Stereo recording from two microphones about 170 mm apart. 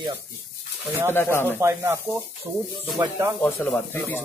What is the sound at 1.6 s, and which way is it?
Speech, 15° right (ahead or behind).